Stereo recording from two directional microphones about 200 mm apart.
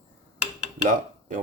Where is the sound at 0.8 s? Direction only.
40° right (ahead or behind).